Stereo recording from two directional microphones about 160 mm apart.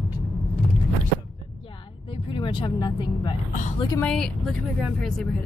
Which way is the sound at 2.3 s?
30° left (ahead or behind).